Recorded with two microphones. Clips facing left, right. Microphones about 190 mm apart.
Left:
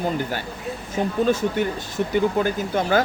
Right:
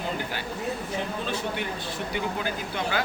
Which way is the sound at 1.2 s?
45° left (ahead or behind).